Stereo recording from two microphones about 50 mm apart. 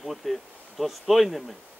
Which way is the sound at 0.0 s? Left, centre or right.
Centre.